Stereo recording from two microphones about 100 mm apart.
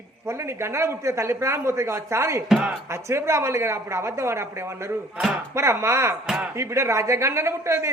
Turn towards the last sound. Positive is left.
turn(degrees=-30)  # may be behind; listen again after turning